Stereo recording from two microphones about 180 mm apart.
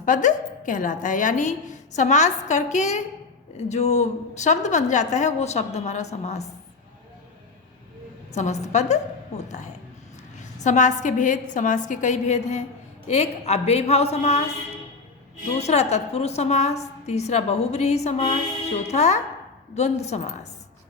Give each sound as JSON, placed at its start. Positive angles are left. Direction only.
{"t": 0.0, "sound": "a woman's voice", "side_deg": 45}
{"t": 8.3, "sound": "a woman's voice", "side_deg": 40}
{"t": 10.4, "sound": "a woman's voice", "side_deg": 40}
{"t": 15.5, "sound": "a woman's voice", "side_deg": 35}